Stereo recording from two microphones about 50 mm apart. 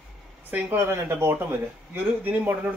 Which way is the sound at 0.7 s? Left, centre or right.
Right.